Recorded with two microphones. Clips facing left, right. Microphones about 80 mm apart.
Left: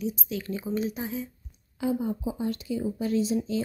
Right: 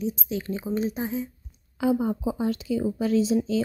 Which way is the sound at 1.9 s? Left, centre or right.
Right.